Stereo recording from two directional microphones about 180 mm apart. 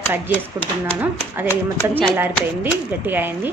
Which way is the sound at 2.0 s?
10° right (ahead or behind).